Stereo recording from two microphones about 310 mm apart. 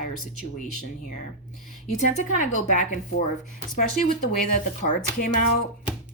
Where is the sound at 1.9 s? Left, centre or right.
Left.